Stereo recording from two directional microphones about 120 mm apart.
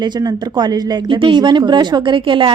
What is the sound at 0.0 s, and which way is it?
Speech, 35° right (ahead or behind).